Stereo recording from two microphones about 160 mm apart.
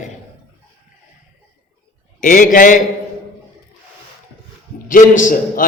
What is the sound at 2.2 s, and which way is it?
Speech, 55° left (ahead or behind).